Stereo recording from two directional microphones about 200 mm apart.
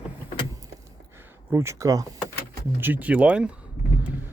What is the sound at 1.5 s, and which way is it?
Speech, 15° right (ahead or behind).